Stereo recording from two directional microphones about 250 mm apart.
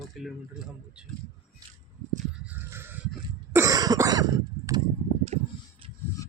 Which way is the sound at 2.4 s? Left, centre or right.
Centre.